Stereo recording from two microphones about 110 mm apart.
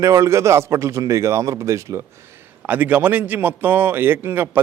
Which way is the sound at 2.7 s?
15° right (ahead or behind).